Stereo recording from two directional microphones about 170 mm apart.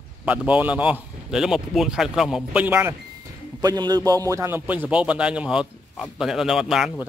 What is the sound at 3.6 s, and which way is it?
A man's voice, 25° right (ahead or behind).